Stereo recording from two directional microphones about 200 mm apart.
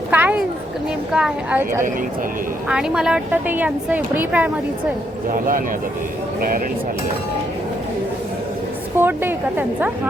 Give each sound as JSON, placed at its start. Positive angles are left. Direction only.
{"t": 0.1, "sound": "a sound", "side_deg": -10}
{"t": 1.1, "sound": "speech", "side_deg": -5}
{"t": 5.3, "sound": "speech", "side_deg": -45}
{"t": 9.0, "sound": "speech", "side_deg": -10}